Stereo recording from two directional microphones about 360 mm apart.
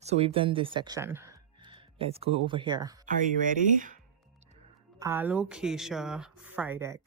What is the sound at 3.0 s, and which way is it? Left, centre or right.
Speech, right.